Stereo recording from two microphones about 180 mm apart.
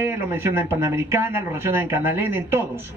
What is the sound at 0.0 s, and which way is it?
A man's voice, 15° right (ahead or behind).